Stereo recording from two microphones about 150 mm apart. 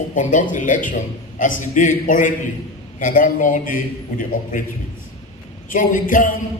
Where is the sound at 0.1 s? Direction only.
60° left (ahead or behind).